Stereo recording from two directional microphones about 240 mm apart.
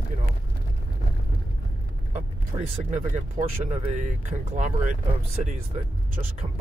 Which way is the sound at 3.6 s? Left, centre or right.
Right.